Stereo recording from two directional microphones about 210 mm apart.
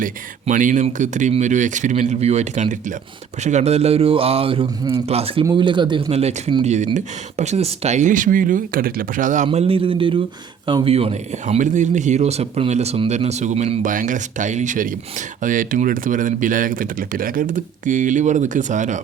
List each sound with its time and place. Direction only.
0.0 s a man's voice: 40° right (ahead or behind)